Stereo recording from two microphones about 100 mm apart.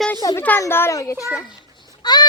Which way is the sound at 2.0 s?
45° left (ahead or behind).